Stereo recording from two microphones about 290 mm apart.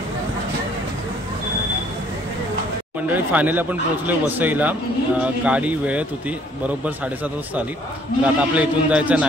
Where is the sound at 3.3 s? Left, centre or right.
Centre.